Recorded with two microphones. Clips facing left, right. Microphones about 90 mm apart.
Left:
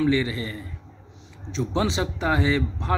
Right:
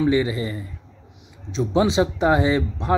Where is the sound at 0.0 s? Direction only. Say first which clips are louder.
Right 3 dB; 20° right (ahead or behind).